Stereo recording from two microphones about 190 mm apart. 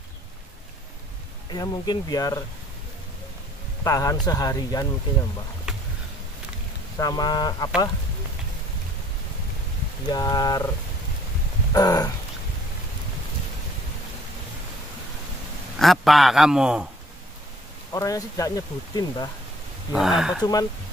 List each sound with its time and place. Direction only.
1.5 s speech: 20° left (ahead or behind)
3.8 s speech: 20° left (ahead or behind)
5.7 s a sound: 5° right (ahead or behind)
7.0 s speech: 20° left (ahead or behind)
10.0 s speech: 20° left (ahead or behind)
11.7 s speech: 20° left (ahead or behind)
15.8 s a man's voice: centre (ahead or behind)
17.9 s speech: 20° left (ahead or behind)
19.9 s a man's voice: centre (ahead or behind)